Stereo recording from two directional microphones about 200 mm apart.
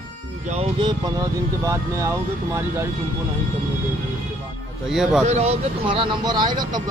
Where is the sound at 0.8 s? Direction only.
20° right (ahead or behind).